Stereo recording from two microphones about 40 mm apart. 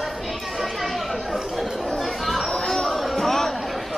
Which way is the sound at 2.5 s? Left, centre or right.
Centre.